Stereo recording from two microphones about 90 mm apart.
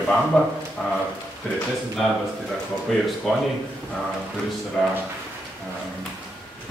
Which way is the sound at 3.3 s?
Centre (ahead or behind).